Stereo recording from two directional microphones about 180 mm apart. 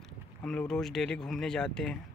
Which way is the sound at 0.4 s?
5° left (ahead or behind).